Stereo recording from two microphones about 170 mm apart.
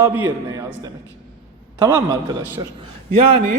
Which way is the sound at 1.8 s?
25° right (ahead or behind).